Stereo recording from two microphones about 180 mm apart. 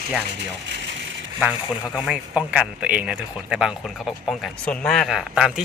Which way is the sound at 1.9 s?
5° right (ahead or behind).